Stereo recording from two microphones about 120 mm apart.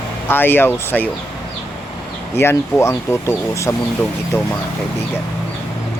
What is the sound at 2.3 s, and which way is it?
Speech, 20° left (ahead or behind).